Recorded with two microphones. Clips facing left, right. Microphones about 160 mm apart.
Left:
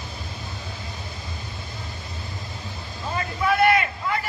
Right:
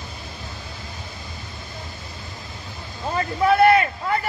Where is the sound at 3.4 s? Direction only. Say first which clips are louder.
Right 4 dB; 40° right (ahead or behind).